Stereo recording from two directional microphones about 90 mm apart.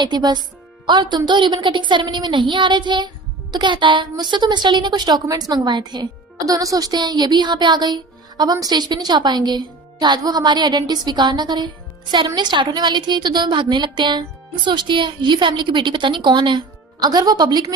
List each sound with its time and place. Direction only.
0.0 s a woman's voice: 55° right (ahead or behind)
17.0 s speech: 45° right (ahead or behind)